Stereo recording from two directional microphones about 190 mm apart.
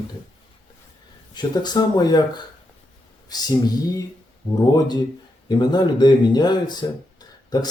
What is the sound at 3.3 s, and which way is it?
Speech, 20° left (ahead or behind).